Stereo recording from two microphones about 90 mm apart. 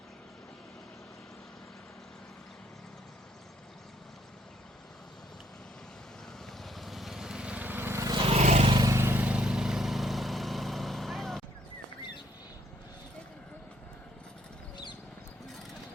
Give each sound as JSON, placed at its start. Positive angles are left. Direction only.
{"t": 6.4, "sound": "vehicle", "side_deg": 0}
{"t": 8.2, "sound": "vehicle", "side_deg": -80}
{"t": 9.0, "sound": "vehicle", "side_deg": -25}